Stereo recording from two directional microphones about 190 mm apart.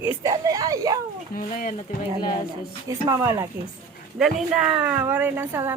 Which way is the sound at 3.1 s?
15° right (ahead or behind).